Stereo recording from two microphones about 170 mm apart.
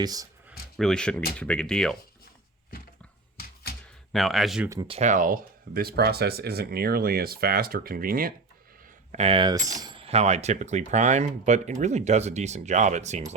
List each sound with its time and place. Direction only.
0.0 s speech: 20° right (ahead or behind)
0.8 s speech: 5° left (ahead or behind)
4.1 s speech: centre (ahead or behind)
4.9 s speech: 40° right (ahead or behind)
9.1 s speech: 35° right (ahead or behind)